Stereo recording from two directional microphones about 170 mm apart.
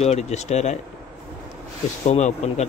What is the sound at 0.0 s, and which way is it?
Speech, 40° left (ahead or behind).